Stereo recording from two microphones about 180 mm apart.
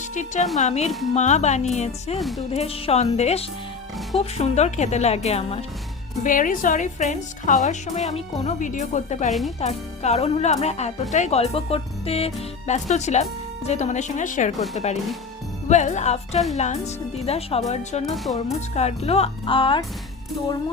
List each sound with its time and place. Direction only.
0.1 s speech: 45° left (ahead or behind)
0.9 s speech: centre (ahead or behind)
1.1 s speech: 40° left (ahead or behind)
2.1 s speech: centre (ahead or behind)
2.5 s speech: 35° left (ahead or behind)
6.2 s a woman's voice: 50° left (ahead or behind)
18.1 s speech: centre (ahead or behind)
18.7 s speech: 35° left (ahead or behind)